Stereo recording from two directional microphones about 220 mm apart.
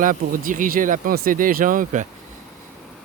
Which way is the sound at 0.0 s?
40° right (ahead or behind).